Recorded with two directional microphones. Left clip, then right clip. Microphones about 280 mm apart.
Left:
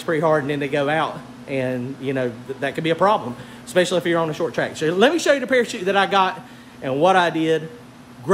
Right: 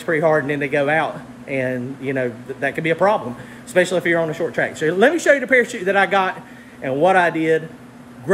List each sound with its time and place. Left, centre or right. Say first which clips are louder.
0.0 s a man's voice: right 2 dB; centre